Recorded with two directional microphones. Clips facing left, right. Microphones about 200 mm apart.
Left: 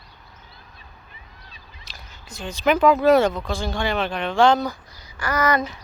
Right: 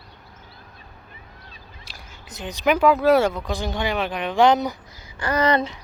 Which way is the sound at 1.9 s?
10° right (ahead or behind).